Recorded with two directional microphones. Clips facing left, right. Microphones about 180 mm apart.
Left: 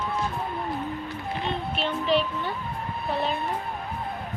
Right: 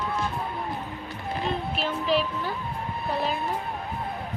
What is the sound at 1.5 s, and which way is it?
Music, centre (ahead or behind).